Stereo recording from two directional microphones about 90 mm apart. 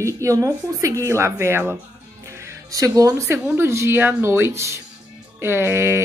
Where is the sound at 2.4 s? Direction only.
40° right (ahead or behind).